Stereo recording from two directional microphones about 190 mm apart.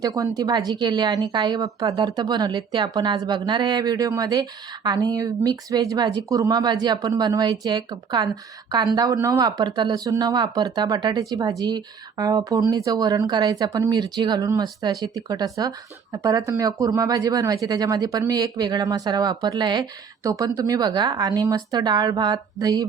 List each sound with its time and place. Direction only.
0.0 s a woman's voice: 20° right (ahead or behind)